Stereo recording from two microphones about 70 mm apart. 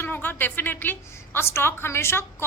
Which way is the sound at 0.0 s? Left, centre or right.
Left.